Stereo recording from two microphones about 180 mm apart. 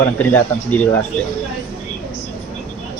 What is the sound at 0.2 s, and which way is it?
Speech, 10° left (ahead or behind).